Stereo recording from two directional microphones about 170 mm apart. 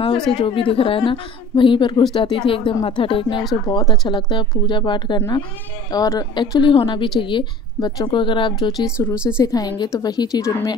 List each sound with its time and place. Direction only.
0.4 s a woman's voice: 30° left (ahead or behind)
8.8 s speech: 5° right (ahead or behind)
9.4 s a woman's voice: 20° left (ahead or behind)